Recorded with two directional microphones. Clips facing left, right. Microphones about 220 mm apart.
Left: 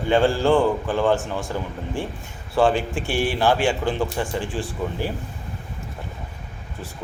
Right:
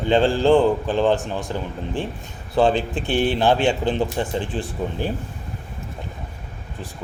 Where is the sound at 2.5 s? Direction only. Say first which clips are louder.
Right 1 dB; 20° right (ahead or behind).